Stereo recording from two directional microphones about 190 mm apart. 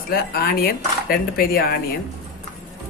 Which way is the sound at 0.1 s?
55° left (ahead or behind).